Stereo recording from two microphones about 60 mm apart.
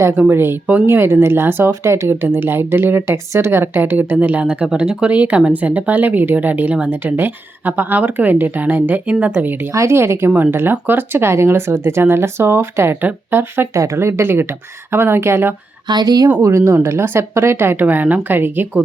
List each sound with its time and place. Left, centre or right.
0.3 s a woman's voice: right; by 6.9 s centre
6.9 s a woman's voice: right
9.7 s a woman's voice: right
13.7 s a woman's voice: right
16.0 s speech: right
16.4 s a woman's voice: right